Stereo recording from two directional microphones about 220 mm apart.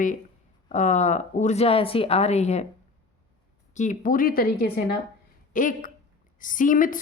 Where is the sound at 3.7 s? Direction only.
35° left (ahead or behind).